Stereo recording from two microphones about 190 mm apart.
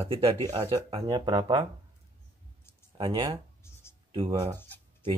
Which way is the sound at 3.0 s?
25° right (ahead or behind).